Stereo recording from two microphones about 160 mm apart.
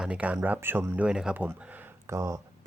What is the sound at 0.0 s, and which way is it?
Speech, 5° right (ahead or behind).